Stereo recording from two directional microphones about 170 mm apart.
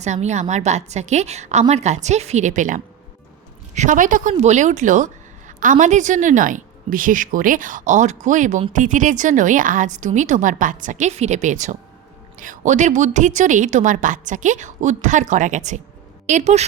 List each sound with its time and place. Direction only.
0.0 s speech: 40° right (ahead or behind)